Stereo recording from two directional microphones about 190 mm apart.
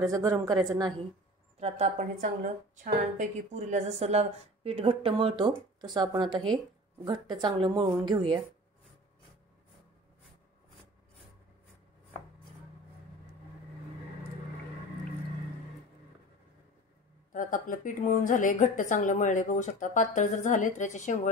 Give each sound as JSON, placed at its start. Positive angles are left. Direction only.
{"t": 0.0, "sound": "speech", "side_deg": -20}
{"t": 1.6, "sound": "a woman's voice", "side_deg": -35}
{"t": 17.3, "sound": "a woman's voice", "side_deg": 45}